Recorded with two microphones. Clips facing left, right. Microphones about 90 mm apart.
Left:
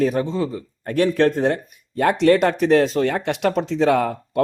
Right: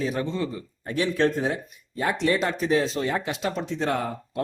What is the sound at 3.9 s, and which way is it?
Speech, 90° left.